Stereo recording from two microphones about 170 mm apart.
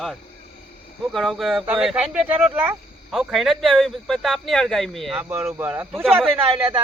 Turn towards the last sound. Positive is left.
turn(degrees=-35)  # may be behind; listen again after turning